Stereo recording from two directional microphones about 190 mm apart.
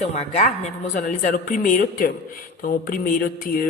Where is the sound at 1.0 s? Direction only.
45° left (ahead or behind).